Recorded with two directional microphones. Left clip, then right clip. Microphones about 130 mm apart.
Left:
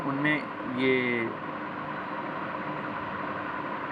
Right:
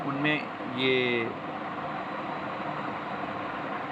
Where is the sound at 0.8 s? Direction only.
55° right (ahead or behind).